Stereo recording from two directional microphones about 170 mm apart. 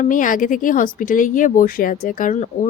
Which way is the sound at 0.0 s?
50° left (ahead or behind).